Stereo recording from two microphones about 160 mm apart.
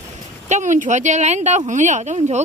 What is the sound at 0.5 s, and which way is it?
Speech, 50° right (ahead or behind).